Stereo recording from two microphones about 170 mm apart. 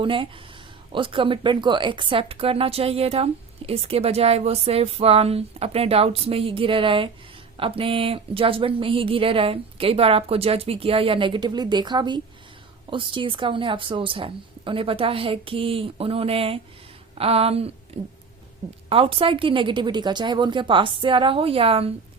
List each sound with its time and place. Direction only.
0.0 s speech: 30° right (ahead or behind)
18.9 s a woman's voice: 30° right (ahead or behind)